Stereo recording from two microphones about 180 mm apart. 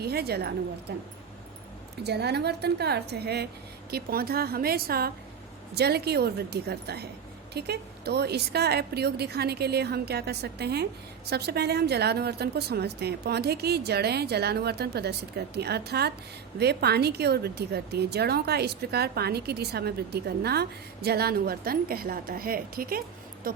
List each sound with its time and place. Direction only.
0.0 s speech: 60° right (ahead or behind)
2.0 s speech: 65° right (ahead or behind)